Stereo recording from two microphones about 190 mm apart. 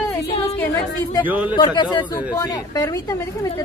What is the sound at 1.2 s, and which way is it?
Speech, 10° right (ahead or behind).